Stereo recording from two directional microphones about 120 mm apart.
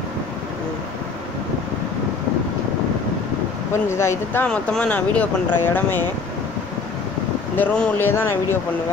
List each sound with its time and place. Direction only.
3.9 s speech: 20° left (ahead or behind)
4.5 s speech: 10° left (ahead or behind)
7.5 s speech: 10° left (ahead or behind)